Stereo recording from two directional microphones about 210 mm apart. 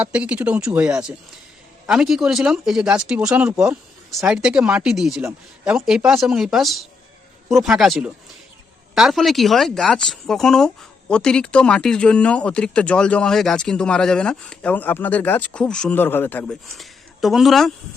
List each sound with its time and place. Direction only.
0.0 s speech: 5° right (ahead or behind)